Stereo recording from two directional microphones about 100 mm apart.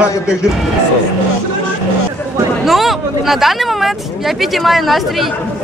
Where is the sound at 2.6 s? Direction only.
Centre (ahead or behind).